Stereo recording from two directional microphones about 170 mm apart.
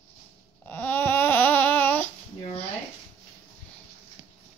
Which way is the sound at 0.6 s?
10° left (ahead or behind).